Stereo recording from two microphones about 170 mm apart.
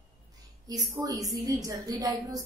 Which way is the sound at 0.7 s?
20° right (ahead or behind).